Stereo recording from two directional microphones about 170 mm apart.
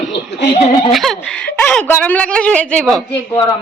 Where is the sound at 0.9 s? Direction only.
Centre (ahead or behind).